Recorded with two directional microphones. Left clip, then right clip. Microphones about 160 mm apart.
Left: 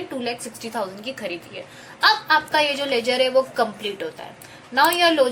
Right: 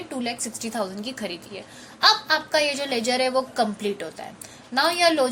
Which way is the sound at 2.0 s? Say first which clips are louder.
Left 2 dB; 50° right (ahead or behind).